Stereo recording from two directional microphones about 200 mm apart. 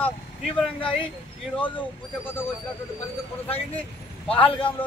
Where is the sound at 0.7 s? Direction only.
25° left (ahead or behind).